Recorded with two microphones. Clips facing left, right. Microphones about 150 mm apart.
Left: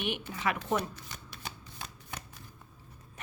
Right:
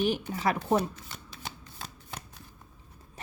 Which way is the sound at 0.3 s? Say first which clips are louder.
Right 4 dB; 35° right (ahead or behind).